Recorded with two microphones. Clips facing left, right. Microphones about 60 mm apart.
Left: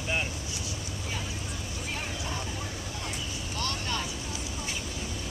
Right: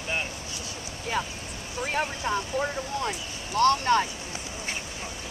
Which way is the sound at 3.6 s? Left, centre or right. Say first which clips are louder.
Right 13 dB; right.